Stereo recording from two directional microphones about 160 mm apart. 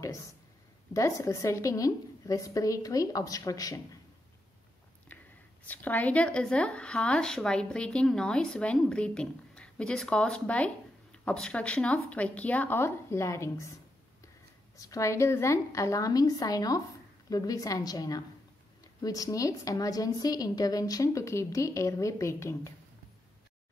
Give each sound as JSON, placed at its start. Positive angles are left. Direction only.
{"t": 0.9, "sound": "a woman's voice", "side_deg": 20}
{"t": 5.7, "sound": "speech", "side_deg": 10}
{"t": 14.8, "sound": "a woman's voice", "side_deg": 20}